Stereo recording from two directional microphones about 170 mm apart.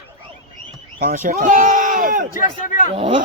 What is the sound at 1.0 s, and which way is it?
Speech, 60° right (ahead or behind).